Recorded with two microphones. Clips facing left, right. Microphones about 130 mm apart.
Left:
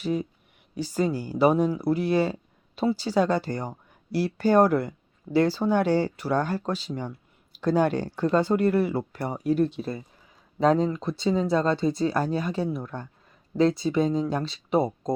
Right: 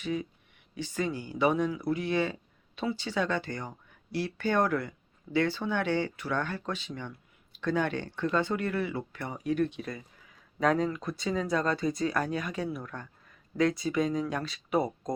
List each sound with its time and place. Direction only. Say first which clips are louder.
0.0 s speech: left 5 dB; 35° left (ahead or behind)